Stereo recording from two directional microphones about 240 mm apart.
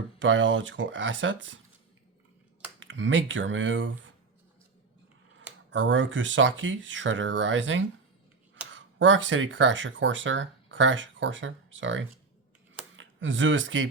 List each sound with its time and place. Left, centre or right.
0.2 s speech: right
2.8 s speech: right
5.7 s speech: right